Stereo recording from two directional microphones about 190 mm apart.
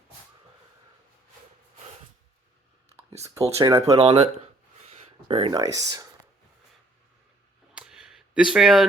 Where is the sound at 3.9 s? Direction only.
35° right (ahead or behind); by 6.1 s 20° right (ahead or behind).